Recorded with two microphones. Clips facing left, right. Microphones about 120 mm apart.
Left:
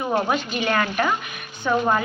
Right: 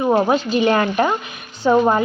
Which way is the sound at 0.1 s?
25° right (ahead or behind).